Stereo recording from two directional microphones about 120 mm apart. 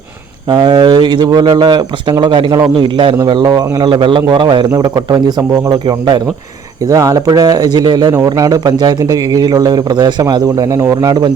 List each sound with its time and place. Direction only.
0.5 s a man's voice: 35° right (ahead or behind)
4.7 s a man's voice: 30° right (ahead or behind)